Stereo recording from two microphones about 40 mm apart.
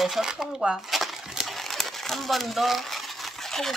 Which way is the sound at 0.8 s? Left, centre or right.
Centre.